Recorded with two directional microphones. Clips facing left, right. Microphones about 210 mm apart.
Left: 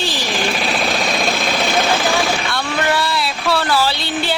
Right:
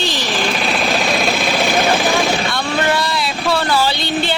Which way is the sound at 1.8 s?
15° right (ahead or behind).